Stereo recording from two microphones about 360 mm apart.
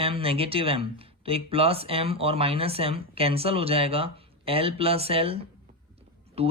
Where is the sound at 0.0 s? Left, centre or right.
Centre.